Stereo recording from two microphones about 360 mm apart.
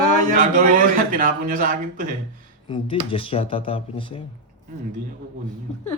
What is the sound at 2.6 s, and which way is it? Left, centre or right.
Speech, centre.